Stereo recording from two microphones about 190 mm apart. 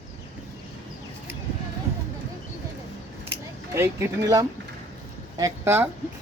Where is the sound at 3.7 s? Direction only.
15° right (ahead or behind).